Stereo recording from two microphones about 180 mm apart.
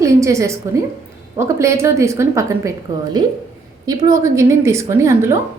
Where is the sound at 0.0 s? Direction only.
15° right (ahead or behind).